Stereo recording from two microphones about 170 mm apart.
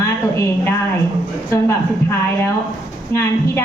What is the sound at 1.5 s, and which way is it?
Speech, 15° left (ahead or behind).